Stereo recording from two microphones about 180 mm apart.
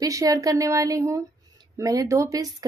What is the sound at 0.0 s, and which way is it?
Speech, 20° right (ahead or behind).